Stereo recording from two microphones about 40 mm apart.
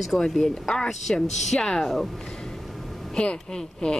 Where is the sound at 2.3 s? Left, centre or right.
Centre.